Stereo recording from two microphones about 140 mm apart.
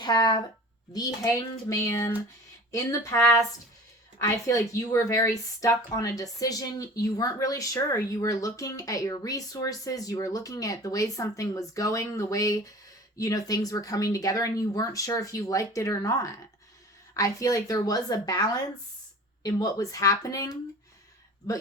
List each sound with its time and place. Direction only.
0.0 s a woman's voice: 30° left (ahead or behind)